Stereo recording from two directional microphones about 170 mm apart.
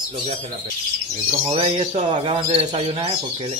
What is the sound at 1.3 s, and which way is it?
Speech, 35° right (ahead or behind).